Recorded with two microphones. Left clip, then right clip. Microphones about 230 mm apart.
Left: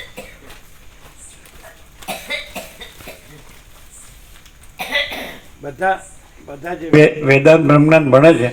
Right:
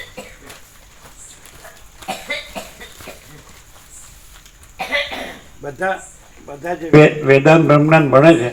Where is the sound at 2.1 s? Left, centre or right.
Left.